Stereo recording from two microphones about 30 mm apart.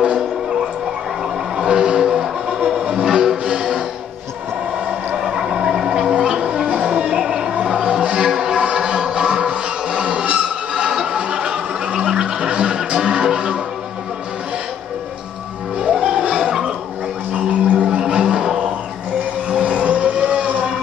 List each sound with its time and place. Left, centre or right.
0.0 s music: right
1.6 s vehicle: right
5.2 s a sound: centre
6.2 s music: right
7.1 s a sound: right
8.3 s music: centre
10.2 s a sound: right
16.3 s gargling: centre
17.3 s gargling: right
17.8 s music: right
19.5 s vehicle: right